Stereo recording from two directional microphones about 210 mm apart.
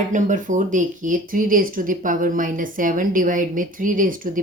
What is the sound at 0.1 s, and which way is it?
Speech, 40° right (ahead or behind).